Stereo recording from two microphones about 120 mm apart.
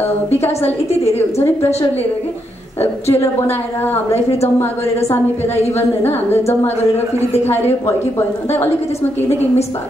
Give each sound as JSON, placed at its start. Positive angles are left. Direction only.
{"t": 0.5, "sound": "a woman's voice", "side_deg": 60}
{"t": 1.1, "sound": "a woman's voice", "side_deg": 20}
{"t": 2.8, "sound": "a woman's voice", "side_deg": 20}
{"t": 5.7, "sound": "a woman's voice", "side_deg": 20}
{"t": 7.4, "sound": "a woman's voice", "side_deg": 20}